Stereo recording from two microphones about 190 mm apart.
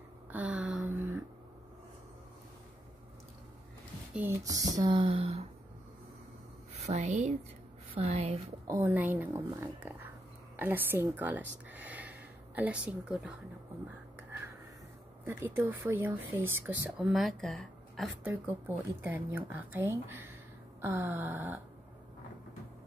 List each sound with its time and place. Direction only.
0.3 s a sound: 5° right (ahead or behind)
4.1 s speech: 10° right (ahead or behind); by 5.4 s 30° right (ahead or behind)
6.8 s a woman's voice: 40° right (ahead or behind)
8.6 s speech: 15° right (ahead or behind)
11.7 s a sound: 10° right (ahead or behind)
15.2 s speech: 10° right (ahead or behind)
18.2 s speech: 10° right (ahead or behind)